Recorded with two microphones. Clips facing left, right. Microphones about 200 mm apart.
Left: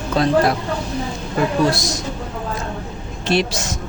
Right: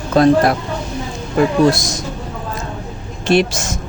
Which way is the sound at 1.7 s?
50° right (ahead or behind).